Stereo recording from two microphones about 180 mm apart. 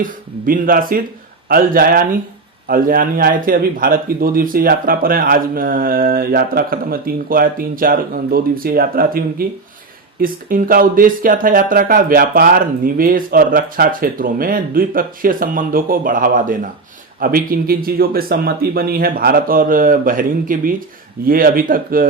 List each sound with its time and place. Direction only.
0.0 s a man's voice: 50° right (ahead or behind)